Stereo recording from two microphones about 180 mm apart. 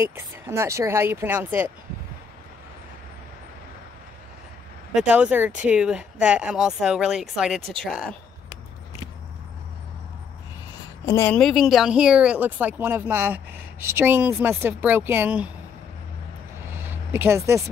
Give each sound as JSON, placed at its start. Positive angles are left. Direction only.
{"t": 0.0, "sound": "speech", "side_deg": -15}
{"t": 4.9, "sound": "speech", "side_deg": -5}
{"t": 11.1, "sound": "a woman's voice", "side_deg": 20}
{"t": 11.3, "sound": "speech", "side_deg": 0}
{"t": 16.7, "sound": "a sound", "side_deg": -10}